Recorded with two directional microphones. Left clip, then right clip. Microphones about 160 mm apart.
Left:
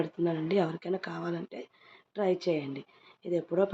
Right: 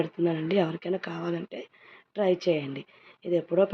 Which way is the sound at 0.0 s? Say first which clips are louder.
Right 3 dB; 5° right (ahead or behind).